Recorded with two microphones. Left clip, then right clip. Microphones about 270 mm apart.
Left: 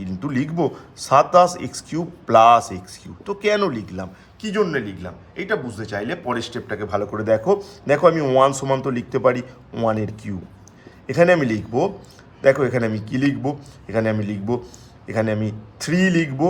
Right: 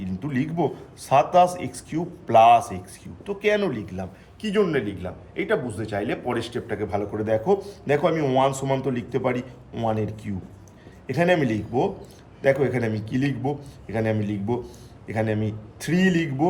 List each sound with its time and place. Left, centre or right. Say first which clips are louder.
0.5 s a man's voice: left 3 dB; left